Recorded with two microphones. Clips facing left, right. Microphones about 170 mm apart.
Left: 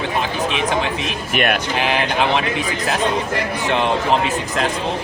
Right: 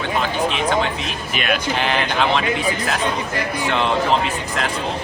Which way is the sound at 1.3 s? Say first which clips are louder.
Left 4 dB; 55° left (ahead or behind).